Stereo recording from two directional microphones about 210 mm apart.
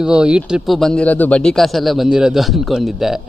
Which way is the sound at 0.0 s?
5° right (ahead or behind).